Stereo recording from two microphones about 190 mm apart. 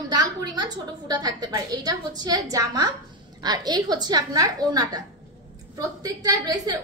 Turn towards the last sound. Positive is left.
turn(degrees=-20)  # may be behind; listen again after turning